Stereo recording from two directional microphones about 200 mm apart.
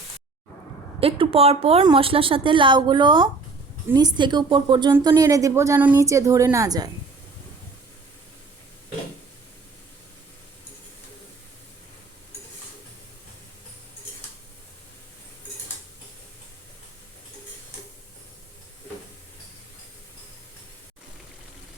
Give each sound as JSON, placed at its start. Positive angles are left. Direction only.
{"t": 1.0, "sound": "a woman's voice", "side_deg": -30}